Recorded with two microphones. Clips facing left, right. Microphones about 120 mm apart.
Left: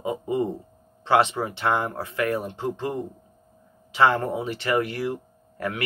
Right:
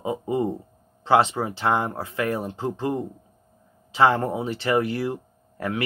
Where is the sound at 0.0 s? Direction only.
25° right (ahead or behind).